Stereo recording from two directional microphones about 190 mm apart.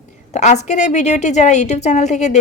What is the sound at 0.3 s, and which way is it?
A woman's voice, 40° left (ahead or behind).